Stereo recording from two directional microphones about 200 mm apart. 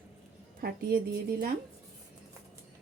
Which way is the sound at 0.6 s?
50° right (ahead or behind).